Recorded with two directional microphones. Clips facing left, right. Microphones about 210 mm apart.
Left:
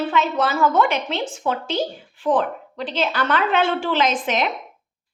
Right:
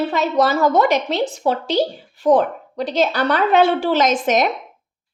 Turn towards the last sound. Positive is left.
turn(degrees=-45)  # may be behind; listen again after turning